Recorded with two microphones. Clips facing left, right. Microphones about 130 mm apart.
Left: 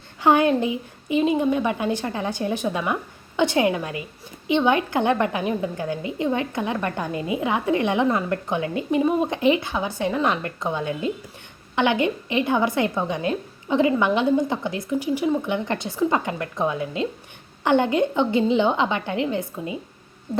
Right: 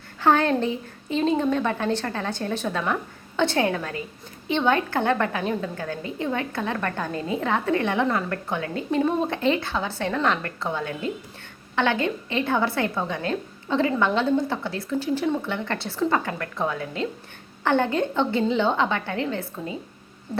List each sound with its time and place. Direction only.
0.2 s a woman's voice: 15° left (ahead or behind)